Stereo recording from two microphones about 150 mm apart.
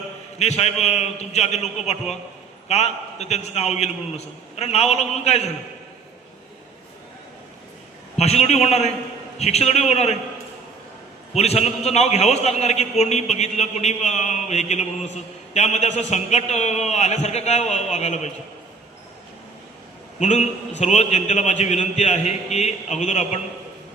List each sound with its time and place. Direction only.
0.3 s a man's voice: 45° left (ahead or behind)
8.1 s a man's voice: 45° left (ahead or behind)
11.3 s a man's voice: 45° left (ahead or behind)
20.1 s a man's voice: 50° left (ahead or behind)